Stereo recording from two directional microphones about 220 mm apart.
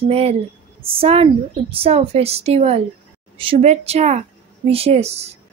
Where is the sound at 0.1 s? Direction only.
25° right (ahead or behind).